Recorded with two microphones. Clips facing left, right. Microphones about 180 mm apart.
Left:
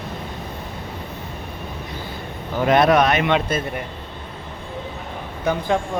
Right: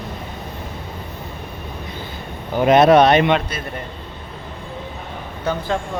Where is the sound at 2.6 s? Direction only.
20° right (ahead or behind).